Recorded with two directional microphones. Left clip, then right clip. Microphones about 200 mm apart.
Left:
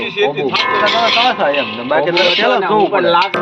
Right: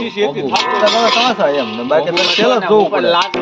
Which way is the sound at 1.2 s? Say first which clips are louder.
Even; 50° right (ahead or behind).